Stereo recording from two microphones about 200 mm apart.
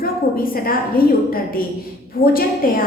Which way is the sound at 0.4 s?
45° left (ahead or behind).